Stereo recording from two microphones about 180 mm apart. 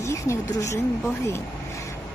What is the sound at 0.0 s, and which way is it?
Speech, 15° left (ahead or behind).